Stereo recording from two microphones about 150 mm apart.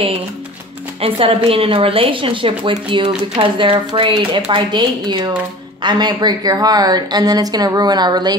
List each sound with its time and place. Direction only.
1.0 s speech: 40° right (ahead or behind)